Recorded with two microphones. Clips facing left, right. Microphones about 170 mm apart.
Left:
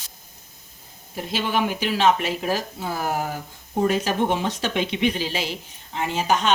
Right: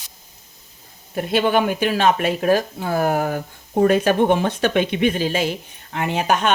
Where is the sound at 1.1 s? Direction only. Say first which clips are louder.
Right 7 dB; 55° right (ahead or behind).